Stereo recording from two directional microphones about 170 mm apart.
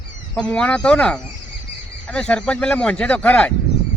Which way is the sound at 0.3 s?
5° left (ahead or behind).